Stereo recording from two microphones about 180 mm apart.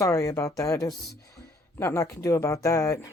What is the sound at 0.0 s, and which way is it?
Speech, 15° left (ahead or behind).